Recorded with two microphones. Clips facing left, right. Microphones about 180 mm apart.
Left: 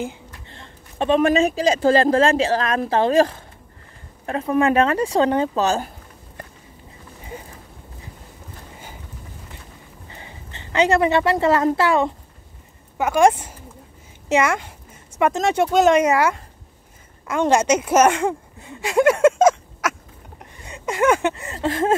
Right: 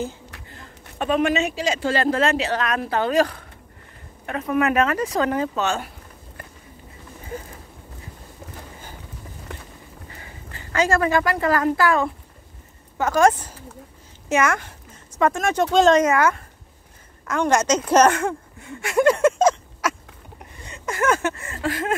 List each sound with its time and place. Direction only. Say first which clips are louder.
0.5 s speech: even; 30° left (ahead or behind)
10.0 s a woman's voice: left 3 dB; 25° left (ahead or behind)
13.1 s speech: left 2 dB; 15° left (ahead or behind)
20.7 s a sound: left 4 dB; 15° left (ahead or behind)